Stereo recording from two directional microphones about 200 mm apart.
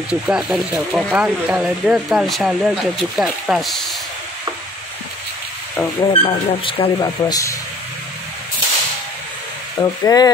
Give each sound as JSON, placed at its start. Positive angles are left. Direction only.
{"t": 0.1, "sound": "speech", "side_deg": -5}
{"t": 5.9, "sound": "speech", "side_deg": 25}
{"t": 9.8, "sound": "speech", "side_deg": 20}